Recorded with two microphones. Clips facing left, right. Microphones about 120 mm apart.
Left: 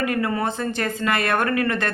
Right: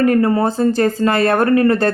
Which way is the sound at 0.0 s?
40° right (ahead or behind).